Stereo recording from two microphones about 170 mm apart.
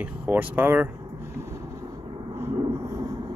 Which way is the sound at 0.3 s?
10° right (ahead or behind).